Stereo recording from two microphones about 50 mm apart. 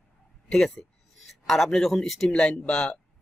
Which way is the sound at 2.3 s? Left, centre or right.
Left.